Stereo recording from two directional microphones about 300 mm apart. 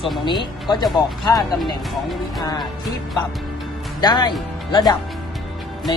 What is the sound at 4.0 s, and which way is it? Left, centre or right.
Speech, centre.